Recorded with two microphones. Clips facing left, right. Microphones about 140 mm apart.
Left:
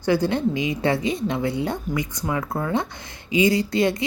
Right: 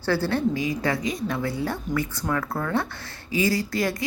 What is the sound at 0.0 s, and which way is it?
A woman's voice, 15° left (ahead or behind).